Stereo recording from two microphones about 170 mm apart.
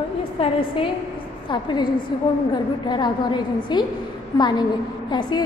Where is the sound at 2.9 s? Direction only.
25° left (ahead or behind).